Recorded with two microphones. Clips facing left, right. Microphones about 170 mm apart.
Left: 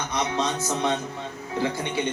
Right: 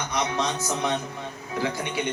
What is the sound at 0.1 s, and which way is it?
A man's voice, 25° left (ahead or behind).